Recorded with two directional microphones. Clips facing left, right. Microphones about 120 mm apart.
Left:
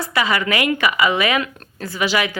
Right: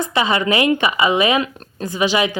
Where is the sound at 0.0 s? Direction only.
25° right (ahead or behind).